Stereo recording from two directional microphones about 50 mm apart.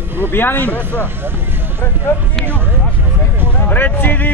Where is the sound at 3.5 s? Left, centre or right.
Left.